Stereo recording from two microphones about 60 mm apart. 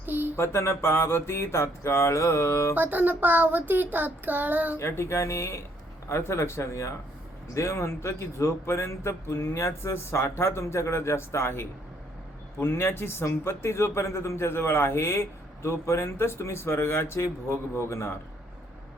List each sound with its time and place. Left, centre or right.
0.0 s a sound: right
0.3 s a man's voice: left
2.7 s child singing: right
4.8 s a man's voice: left